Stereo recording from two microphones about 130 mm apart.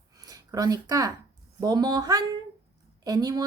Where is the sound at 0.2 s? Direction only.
30° right (ahead or behind).